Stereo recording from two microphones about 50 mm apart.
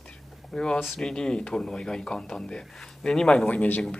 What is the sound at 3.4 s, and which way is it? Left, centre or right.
Speech, left.